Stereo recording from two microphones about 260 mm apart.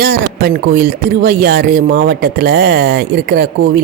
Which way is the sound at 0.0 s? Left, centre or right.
Right.